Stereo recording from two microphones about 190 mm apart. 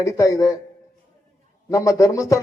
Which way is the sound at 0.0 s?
15° left (ahead or behind).